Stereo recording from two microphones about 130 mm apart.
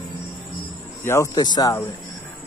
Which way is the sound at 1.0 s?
20° left (ahead or behind).